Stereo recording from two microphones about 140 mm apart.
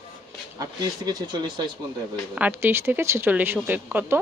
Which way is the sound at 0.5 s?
30° right (ahead or behind).